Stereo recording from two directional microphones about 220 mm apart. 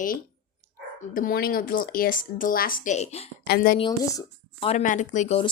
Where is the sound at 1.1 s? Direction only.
40° left (ahead or behind).